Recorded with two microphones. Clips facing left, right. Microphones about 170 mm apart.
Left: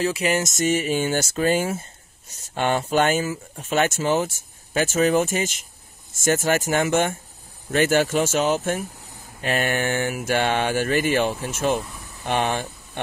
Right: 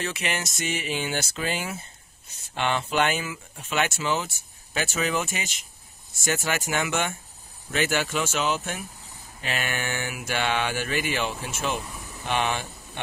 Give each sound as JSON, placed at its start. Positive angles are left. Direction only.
{"t": 0.0, "sound": "speech", "side_deg": 35}